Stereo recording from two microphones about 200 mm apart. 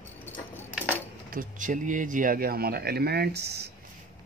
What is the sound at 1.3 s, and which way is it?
Speech, 45° right (ahead or behind).